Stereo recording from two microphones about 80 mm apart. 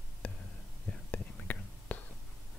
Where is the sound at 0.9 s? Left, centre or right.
Centre.